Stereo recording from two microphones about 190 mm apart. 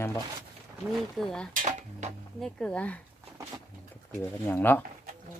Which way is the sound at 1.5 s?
40° right (ahead or behind).